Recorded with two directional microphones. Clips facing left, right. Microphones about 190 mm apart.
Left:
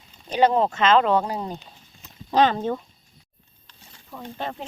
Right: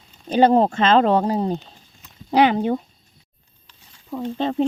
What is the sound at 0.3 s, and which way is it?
Speech, 35° right (ahead or behind).